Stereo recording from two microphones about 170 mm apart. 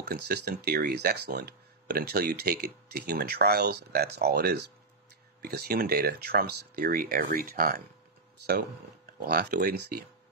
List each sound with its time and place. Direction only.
0.0 s speech: 70° right (ahead or behind)
9.2 s speech: 65° right (ahead or behind)